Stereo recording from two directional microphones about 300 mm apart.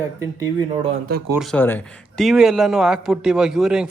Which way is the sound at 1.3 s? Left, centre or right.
Centre.